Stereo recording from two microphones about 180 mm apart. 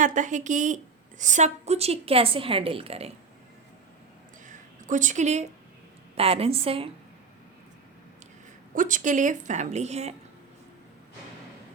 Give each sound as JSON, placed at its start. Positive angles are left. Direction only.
{"t": 0.0, "sound": "a woman's voice", "side_deg": -45}
{"t": 4.4, "sound": "a sound", "side_deg": -45}
{"t": 6.1, "sound": "a woman's voice", "side_deg": -35}
{"t": 8.7, "sound": "a woman's voice", "side_deg": -45}